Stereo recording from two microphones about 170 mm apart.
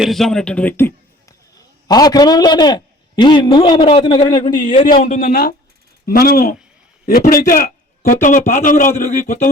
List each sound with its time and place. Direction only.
0.0 s speech: centre (ahead or behind)
1.9 s a man's voice: 25° left (ahead or behind)
4.9 s a man's voice: 50° left (ahead or behind)
9.0 s a sound: 45° left (ahead or behind)